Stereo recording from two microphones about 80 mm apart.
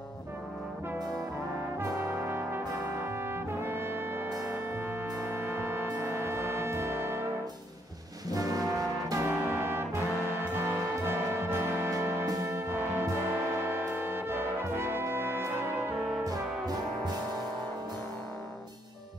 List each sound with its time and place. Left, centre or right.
1.8 s brass instrument: right
5.3 s music: right
8.3 s brass instrument: right
9.2 s music: right
13.3 s brass instrument: right
16.3 s brass instrument: right